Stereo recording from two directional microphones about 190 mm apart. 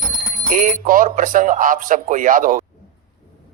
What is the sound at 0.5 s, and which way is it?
Speech, 45° right (ahead or behind).